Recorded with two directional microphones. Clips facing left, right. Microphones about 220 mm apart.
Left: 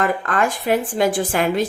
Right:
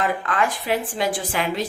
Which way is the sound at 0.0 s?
45° left (ahead or behind).